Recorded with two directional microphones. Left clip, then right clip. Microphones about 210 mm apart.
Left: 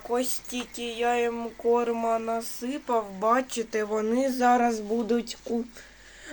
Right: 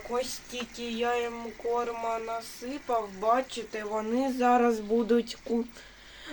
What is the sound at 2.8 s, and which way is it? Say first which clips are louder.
Speech: left 2 dB; 40° left (ahead or behind).